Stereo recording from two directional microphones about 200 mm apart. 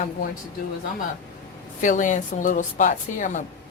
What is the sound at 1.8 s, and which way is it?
A woman's voice, 40° left (ahead or behind).